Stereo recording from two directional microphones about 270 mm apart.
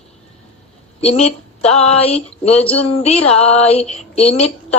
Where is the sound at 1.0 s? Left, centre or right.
Left.